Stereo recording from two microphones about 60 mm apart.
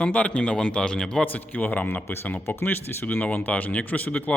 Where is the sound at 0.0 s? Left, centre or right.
Centre.